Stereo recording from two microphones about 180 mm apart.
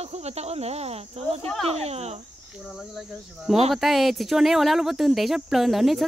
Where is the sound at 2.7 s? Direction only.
Centre (ahead or behind).